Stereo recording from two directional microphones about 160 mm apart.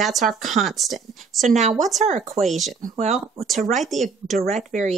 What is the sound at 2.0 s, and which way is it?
Speech, 45° right (ahead or behind).